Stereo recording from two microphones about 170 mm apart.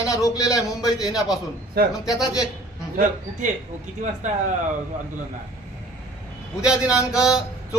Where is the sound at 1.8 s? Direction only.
70° right (ahead or behind).